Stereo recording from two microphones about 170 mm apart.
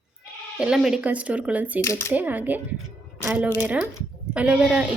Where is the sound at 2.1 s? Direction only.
10° right (ahead or behind).